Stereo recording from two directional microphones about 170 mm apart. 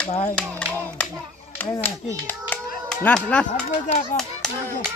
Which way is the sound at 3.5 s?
40° left (ahead or behind).